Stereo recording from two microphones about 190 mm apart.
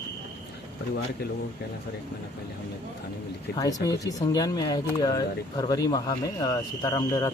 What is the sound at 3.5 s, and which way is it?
Speech, 20° left (ahead or behind).